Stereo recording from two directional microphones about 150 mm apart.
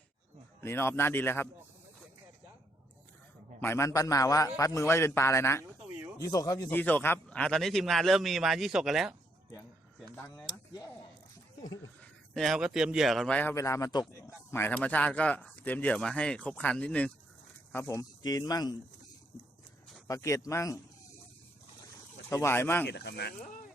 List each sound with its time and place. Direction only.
0.6 s speech: 15° left (ahead or behind)
3.6 s a man's voice: 15° left (ahead or behind)
6.7 s a man's voice: 10° left (ahead or behind)
10.7 s a sound: 25° left (ahead or behind)
12.3 s a man's voice: centre (ahead or behind); by 18.8 s 25° left (ahead or behind)
20.1 s a man's voice: 20° left (ahead or behind)
22.3 s speech: 20° left (ahead or behind)
22.9 s speech: 90° left